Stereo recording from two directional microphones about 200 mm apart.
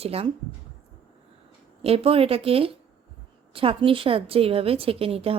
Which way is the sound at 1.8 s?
30° right (ahead or behind).